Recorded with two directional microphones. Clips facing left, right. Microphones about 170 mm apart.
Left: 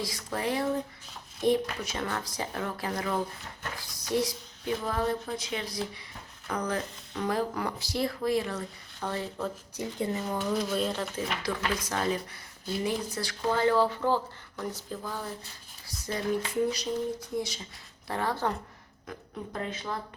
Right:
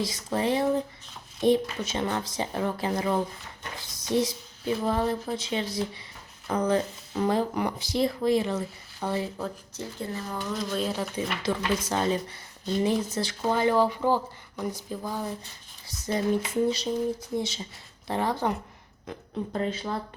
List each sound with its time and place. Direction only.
0.0 s speech: 20° right (ahead or behind)
9.0 s speech: 5° right (ahead or behind)
9.7 s speech: 20° left (ahead or behind)
10.3 s speech: 5° left (ahead or behind)
11.4 s speech: 25° right (ahead or behind)
19.5 s speech: 30° right (ahead or behind)